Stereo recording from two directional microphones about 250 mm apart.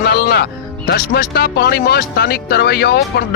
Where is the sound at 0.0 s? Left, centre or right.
Left.